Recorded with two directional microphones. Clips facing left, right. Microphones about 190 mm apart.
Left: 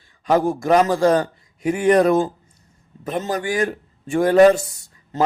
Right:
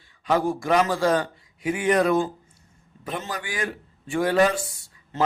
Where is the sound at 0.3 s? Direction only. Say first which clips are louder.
Left 5 dB; 45° left (ahead or behind).